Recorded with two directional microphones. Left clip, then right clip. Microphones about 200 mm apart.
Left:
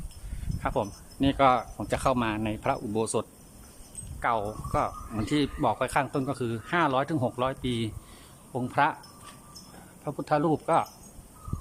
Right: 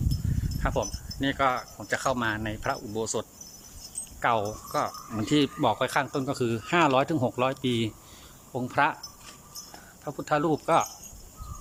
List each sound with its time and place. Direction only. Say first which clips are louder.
0.6 s speech: even; 5° left (ahead or behind)
4.2 s speech: right 2 dB; centre (ahead or behind)
10.0 s speech: even; 5° left (ahead or behind)